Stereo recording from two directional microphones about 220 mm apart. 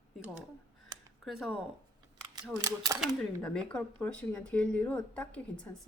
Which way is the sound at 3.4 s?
5° left (ahead or behind).